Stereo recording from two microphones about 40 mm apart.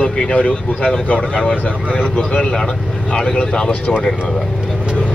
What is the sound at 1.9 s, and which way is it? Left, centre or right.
Speech, left.